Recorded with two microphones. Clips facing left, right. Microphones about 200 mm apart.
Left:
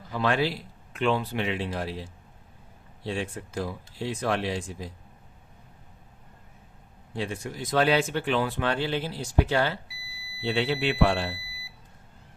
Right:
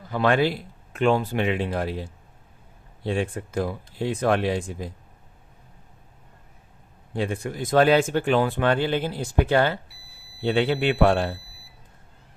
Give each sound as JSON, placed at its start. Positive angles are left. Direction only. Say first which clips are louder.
{"t": 0.1, "sound": "speech", "louder": "right 5 dB", "side_deg": -55}
{"t": 7.1, "sound": "speech", "louder": "right 5 dB", "side_deg": -55}